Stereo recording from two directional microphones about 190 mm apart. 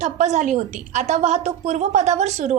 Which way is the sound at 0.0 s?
40° right (ahead or behind).